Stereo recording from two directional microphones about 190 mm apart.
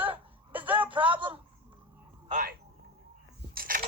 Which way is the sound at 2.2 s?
45° right (ahead or behind).